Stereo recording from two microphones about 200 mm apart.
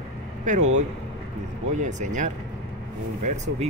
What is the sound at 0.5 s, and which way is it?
Speech, 35° right (ahead or behind).